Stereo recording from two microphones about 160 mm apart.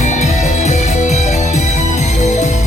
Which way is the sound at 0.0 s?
45° left (ahead or behind).